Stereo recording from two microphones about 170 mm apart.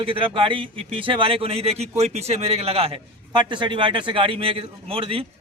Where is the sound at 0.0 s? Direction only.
30° right (ahead or behind).